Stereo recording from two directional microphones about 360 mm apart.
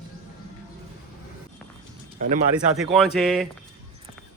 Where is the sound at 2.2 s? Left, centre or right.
Centre.